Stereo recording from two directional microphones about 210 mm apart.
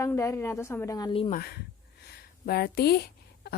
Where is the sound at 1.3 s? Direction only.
50° left (ahead or behind).